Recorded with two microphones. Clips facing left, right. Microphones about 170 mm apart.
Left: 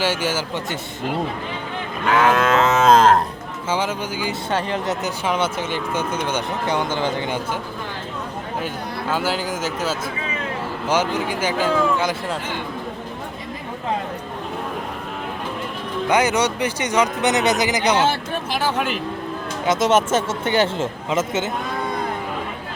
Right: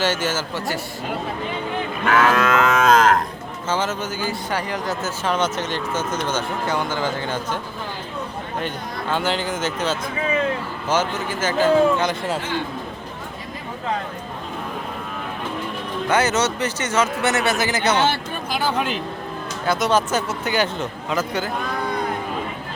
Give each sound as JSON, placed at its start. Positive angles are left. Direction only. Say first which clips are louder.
{"t": 0.0, "sound": "speech", "louder": "even", "side_deg": 10}
{"t": 2.1, "sound": "speech", "louder": "left 1 dB", "side_deg": 20}
{"t": 3.7, "sound": "speech", "louder": "even", "side_deg": 10}
{"t": 4.5, "sound": "speech", "louder": "left 4 dB", "side_deg": 25}
{"t": 8.6, "sound": "speech", "louder": "even", "side_deg": 5}
{"t": 16.0, "sound": "speech", "louder": "left 1 dB", "side_deg": 15}
{"t": 18.5, "sound": "speech", "louder": "even", "side_deg": 0}
{"t": 19.6, "sound": "speech", "louder": "left 2 dB", "side_deg": 20}